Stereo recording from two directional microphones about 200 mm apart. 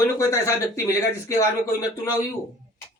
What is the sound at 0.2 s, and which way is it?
Speech, 15° left (ahead or behind).